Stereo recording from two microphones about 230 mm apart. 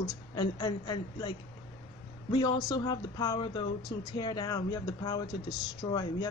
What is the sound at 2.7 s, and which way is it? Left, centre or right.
Speech, centre.